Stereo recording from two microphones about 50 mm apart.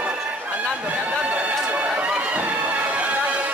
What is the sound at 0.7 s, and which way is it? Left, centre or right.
Chatter, right.